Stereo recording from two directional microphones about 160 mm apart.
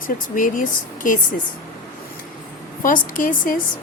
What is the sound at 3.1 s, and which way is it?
Speech, 60° left (ahead or behind).